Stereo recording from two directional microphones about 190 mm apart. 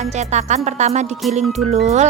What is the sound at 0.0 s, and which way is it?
Speech, 35° right (ahead or behind).